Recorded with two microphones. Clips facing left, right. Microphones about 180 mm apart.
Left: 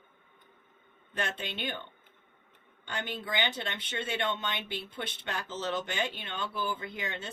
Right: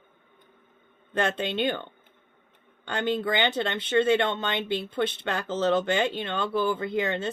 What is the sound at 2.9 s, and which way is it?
Speech, 75° right (ahead or behind).